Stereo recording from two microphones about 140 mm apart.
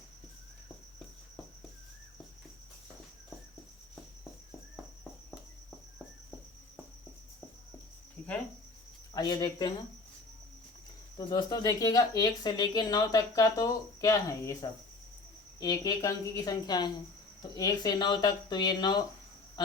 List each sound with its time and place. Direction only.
9.1 s speech: 30° left (ahead or behind)
11.2 s speech: 30° left (ahead or behind)